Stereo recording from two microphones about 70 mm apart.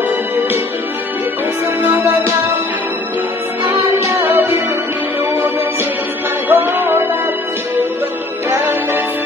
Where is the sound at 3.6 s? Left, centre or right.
Right.